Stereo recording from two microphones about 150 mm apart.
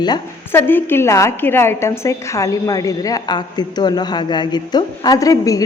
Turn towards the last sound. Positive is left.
turn(degrees=25)  # may be behind; listen again after turning